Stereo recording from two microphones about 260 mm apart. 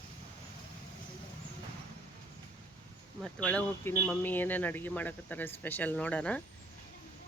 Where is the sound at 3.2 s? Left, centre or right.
Centre.